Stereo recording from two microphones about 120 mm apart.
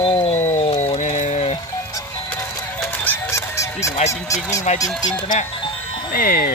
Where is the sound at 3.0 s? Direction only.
20° left (ahead or behind).